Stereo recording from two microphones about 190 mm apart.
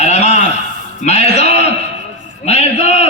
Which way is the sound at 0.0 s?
35° left (ahead or behind).